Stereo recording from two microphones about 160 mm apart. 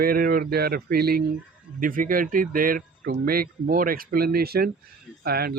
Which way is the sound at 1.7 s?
60° right (ahead or behind).